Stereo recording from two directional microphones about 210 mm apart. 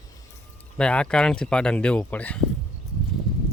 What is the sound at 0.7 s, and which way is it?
Speech, 5° left (ahead or behind).